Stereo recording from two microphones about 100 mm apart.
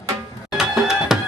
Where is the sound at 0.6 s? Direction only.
5° right (ahead or behind).